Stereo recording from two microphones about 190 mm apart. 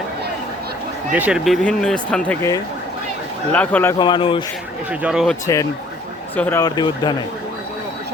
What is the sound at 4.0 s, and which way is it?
Speech, 25° left (ahead or behind).